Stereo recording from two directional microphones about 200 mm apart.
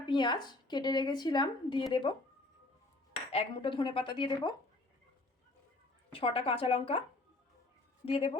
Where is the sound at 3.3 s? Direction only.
25° left (ahead or behind).